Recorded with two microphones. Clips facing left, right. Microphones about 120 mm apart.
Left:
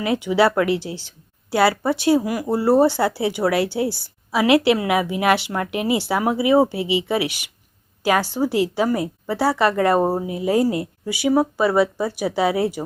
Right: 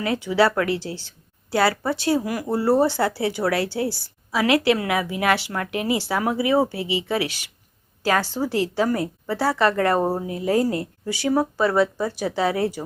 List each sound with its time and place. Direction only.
0.0 s a woman's voice: 20° left (ahead or behind)